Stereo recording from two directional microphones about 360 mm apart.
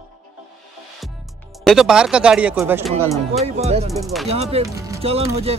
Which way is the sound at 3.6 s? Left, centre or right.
Centre.